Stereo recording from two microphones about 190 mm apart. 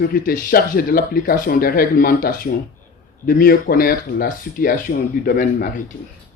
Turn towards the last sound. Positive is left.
turn(degrees=45)  # may be behind; listen again after turning